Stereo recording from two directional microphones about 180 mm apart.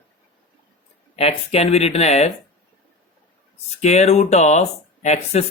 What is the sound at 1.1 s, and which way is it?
Speech, 35° left (ahead or behind).